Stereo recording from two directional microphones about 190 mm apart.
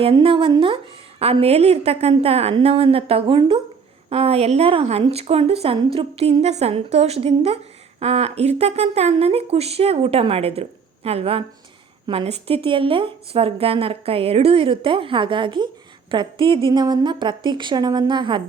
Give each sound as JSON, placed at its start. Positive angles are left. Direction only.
{"t": 0.0, "sound": "speech", "side_deg": -30}